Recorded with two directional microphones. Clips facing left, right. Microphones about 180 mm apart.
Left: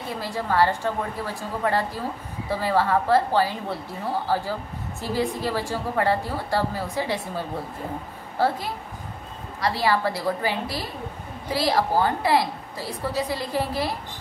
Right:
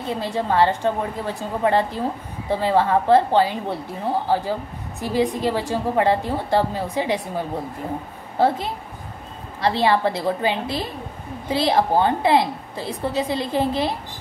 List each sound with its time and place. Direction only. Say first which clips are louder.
0.2 s a woman's voice: right 3 dB; 25° right (ahead or behind)
8.4 s a woman's voice: right 4 dB; 20° right (ahead or behind)